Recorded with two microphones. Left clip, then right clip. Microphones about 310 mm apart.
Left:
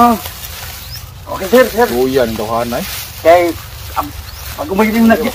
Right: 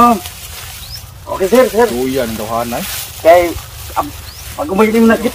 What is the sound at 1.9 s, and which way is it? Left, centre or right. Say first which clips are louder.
Speech: left 4 dB; centre.